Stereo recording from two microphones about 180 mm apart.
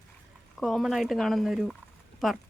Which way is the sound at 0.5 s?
Centre (ahead or behind).